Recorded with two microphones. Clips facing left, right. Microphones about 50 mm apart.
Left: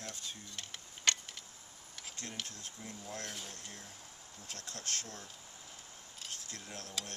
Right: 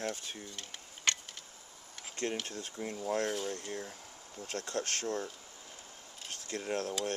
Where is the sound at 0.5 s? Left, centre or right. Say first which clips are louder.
Right 1 dB; centre.